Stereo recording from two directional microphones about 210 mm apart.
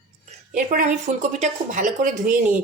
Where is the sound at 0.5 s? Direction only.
40° right (ahead or behind).